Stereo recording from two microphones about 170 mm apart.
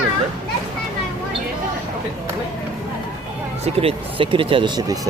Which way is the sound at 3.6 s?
35° right (ahead or behind).